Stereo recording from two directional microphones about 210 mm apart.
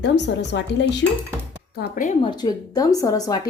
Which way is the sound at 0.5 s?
55° left (ahead or behind).